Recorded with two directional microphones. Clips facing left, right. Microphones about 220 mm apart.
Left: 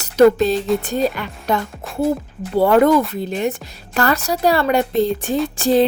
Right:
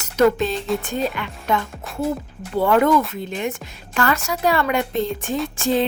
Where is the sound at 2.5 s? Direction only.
35° left (ahead or behind).